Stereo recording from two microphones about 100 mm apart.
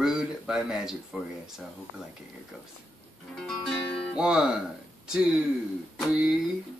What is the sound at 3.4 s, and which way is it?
Music, 5° left (ahead or behind).